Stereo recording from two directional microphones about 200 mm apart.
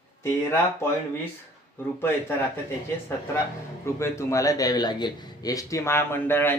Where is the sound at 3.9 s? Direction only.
15° left (ahead or behind).